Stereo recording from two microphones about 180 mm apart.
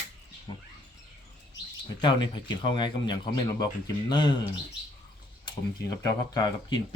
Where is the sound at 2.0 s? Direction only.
25° left (ahead or behind).